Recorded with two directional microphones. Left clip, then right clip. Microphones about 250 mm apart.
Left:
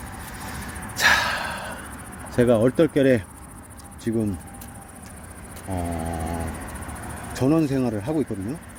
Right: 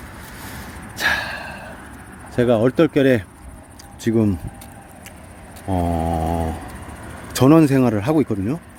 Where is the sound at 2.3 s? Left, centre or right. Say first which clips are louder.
Right 2 dB; centre.